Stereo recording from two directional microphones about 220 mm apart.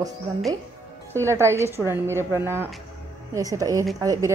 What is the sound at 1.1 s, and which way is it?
A woman's voice, 10° right (ahead or behind).